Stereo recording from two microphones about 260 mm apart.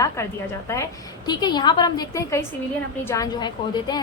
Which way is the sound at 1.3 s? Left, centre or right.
Centre.